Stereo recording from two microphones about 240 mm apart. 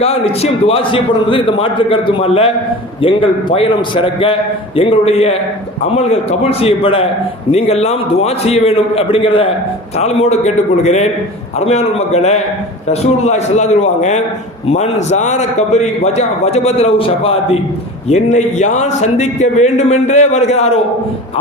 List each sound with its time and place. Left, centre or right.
0.0 s a man's voice: left